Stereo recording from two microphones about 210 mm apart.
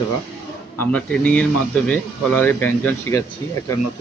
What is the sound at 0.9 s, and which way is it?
Speech, 5° left (ahead or behind).